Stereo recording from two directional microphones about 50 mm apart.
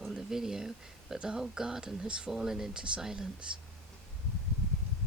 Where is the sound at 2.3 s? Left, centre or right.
Centre.